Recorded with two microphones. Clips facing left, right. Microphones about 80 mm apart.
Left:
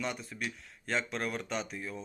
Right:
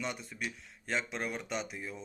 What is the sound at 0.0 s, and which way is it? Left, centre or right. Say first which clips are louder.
Speech: left 2 dB; centre.